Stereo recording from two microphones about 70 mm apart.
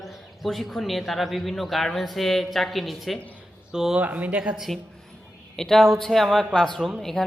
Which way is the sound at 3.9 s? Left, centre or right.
Right.